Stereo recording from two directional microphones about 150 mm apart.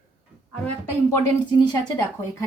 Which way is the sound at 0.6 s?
20° left (ahead or behind).